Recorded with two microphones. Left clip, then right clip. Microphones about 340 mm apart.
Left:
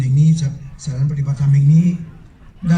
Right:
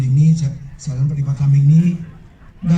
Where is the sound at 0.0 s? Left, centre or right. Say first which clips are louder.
Even; left.